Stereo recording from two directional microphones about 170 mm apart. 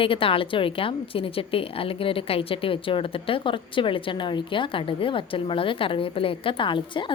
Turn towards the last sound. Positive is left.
turn(degrees=30)  # may be behind; listen again after turning